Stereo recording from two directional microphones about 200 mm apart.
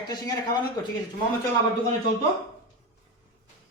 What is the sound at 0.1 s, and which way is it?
Speech, 20° left (ahead or behind).